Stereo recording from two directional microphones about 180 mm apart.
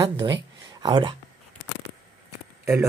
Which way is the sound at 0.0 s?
20° right (ahead or behind).